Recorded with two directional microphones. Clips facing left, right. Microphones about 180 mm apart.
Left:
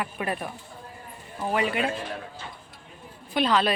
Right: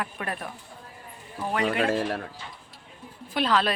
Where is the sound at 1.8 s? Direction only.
70° right (ahead or behind).